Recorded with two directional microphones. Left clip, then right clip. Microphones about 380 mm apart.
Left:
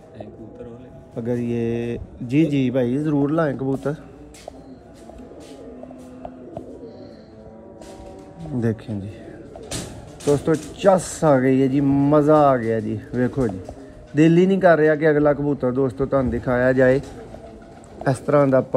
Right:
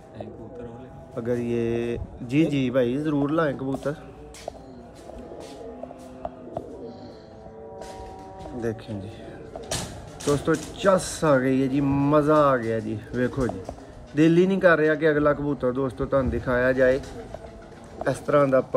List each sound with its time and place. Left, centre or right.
1.1 s a man's voice: centre
8.6 s a man's voice: centre
10.5 s a man's voice: centre
18.0 s a man's voice: centre